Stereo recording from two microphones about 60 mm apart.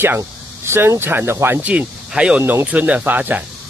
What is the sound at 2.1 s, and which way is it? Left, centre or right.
Speech, centre.